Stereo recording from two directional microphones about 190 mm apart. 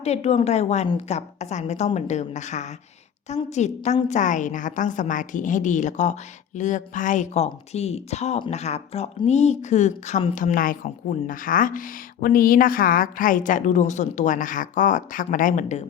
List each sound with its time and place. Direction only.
0.0 s speech: 35° left (ahead or behind)